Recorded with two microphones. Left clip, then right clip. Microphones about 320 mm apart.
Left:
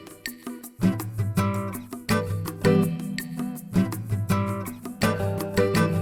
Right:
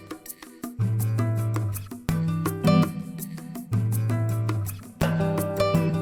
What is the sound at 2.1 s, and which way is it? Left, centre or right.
Music, centre.